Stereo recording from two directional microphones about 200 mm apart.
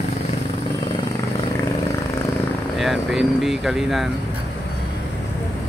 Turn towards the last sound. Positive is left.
turn(degrees=0)  # may be behind; listen again after turning